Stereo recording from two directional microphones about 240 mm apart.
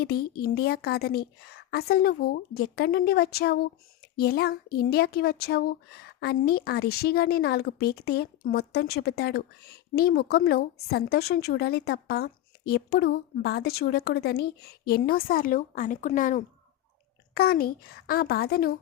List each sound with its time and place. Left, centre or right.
0.0 s a woman's voice: left